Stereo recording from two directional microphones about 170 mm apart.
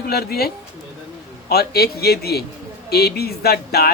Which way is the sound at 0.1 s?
70° left (ahead or behind).